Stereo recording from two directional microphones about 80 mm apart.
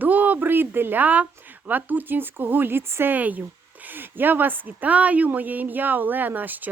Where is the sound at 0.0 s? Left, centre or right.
Right.